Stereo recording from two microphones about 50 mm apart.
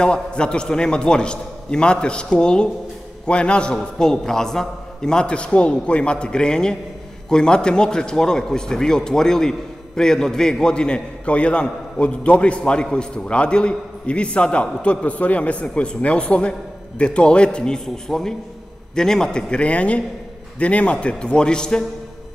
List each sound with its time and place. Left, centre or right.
0.0 s a man's voice: centre